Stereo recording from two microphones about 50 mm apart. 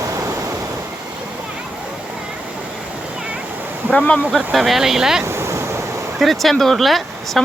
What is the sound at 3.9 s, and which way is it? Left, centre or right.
Speech, left.